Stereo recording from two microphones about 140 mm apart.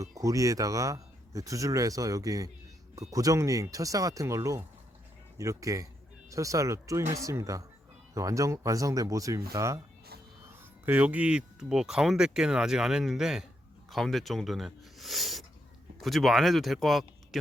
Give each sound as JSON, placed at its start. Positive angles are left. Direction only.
{"t": 0.0, "sound": "speech", "side_deg": -25}
{"t": 10.8, "sound": "speech", "side_deg": -10}